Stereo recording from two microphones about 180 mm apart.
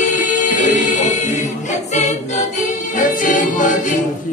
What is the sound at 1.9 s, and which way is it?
Music, 40° left (ahead or behind).